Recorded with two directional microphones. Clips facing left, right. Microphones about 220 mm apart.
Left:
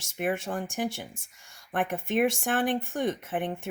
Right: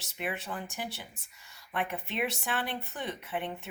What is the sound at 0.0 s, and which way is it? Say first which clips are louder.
Speech: left 7 dB; 45° left (ahead or behind).